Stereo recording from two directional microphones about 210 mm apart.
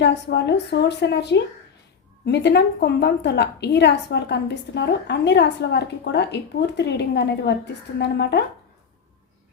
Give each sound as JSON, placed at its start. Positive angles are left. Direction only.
{"t": 0.0, "sound": "a woman's voice", "side_deg": 55}